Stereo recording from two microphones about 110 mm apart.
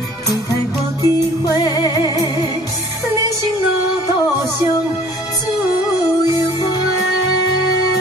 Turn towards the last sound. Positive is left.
turn(degrees=35)  # may be behind; listen again after turning